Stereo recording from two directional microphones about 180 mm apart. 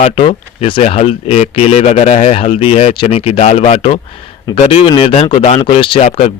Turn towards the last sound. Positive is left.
turn(degrees=30)  # may be behind; listen again after turning